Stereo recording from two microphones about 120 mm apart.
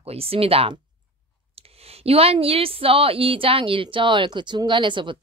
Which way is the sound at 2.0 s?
55° right (ahead or behind).